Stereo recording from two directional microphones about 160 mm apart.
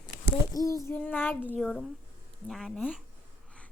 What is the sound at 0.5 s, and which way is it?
A woman's voice, 20° left (ahead or behind).